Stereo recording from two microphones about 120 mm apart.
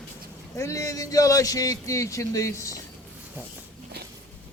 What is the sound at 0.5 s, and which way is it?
A man's voice, 25° left (ahead or behind).